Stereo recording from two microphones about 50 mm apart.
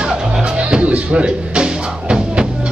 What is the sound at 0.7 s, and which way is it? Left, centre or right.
Music, right.